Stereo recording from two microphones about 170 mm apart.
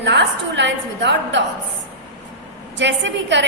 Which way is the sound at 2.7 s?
90° right.